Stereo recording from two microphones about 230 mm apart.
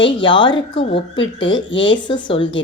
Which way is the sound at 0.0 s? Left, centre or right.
Left.